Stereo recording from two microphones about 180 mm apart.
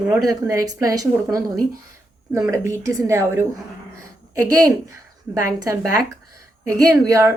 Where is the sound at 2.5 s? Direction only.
15° right (ahead or behind).